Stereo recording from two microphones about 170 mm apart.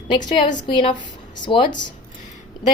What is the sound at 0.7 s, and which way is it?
A woman's voice, 25° left (ahead or behind).